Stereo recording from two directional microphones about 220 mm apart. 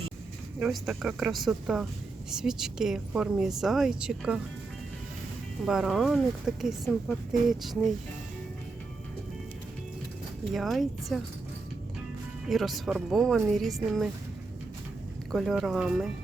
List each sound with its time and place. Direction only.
0.6 s speech: centre (ahead or behind)
5.6 s speech: centre (ahead or behind)
10.5 s speech: centre (ahead or behind)
12.5 s speech: centre (ahead or behind)
15.3 s speech: centre (ahead or behind)